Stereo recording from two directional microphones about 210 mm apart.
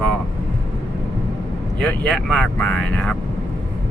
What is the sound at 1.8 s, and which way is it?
Speech, centre (ahead or behind).